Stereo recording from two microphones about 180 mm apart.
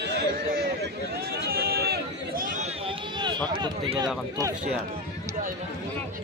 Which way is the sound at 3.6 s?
25° right (ahead or behind).